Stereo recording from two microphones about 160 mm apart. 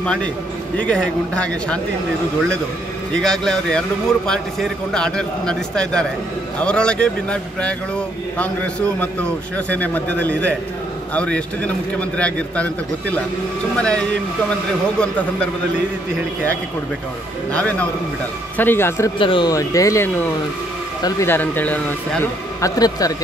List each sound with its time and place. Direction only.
0.0 s a man's voice: 5° left (ahead or behind)
3.2 s a man's voice: 5° left (ahead or behind)
13.7 s a man's voice: 5° left (ahead or behind)
17.5 s a man's voice: 10° left (ahead or behind)
19.1 s speech: 30° left (ahead or behind)
19.5 s a man's voice: 20° left (ahead or behind)